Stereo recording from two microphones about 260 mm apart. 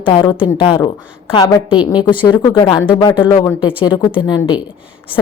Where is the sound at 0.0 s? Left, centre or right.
Centre.